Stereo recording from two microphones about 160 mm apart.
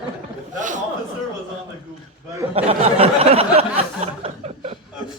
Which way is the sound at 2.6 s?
40° right (ahead or behind).